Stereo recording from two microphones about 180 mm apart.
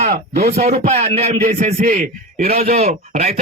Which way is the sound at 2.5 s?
35° right (ahead or behind).